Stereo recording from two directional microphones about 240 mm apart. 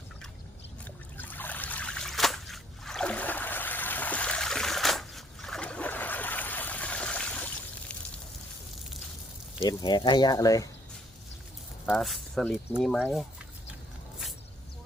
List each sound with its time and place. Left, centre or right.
1.1 s trickle: centre
9.6 s speech: centre
11.9 s speech: centre